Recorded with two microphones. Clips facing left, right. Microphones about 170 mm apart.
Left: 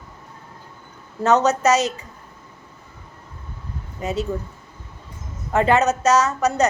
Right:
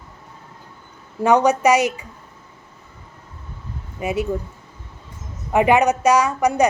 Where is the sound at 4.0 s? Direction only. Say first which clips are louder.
Right 2 dB; 10° right (ahead or behind).